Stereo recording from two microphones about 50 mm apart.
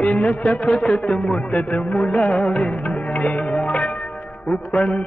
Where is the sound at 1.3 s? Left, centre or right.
Centre.